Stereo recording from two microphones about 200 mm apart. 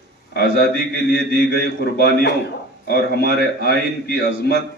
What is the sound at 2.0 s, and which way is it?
Speech, 55° left (ahead or behind).